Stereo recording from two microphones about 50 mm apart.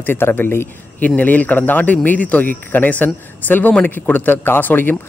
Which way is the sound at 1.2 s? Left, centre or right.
Left.